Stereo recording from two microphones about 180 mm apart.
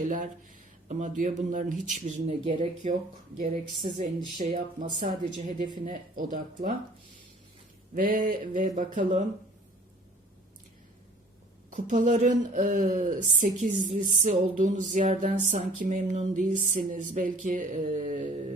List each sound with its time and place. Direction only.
0.0 s speech: 45° right (ahead or behind)
7.9 s speech: 50° right (ahead or behind)
11.7 s speech: 45° right (ahead or behind)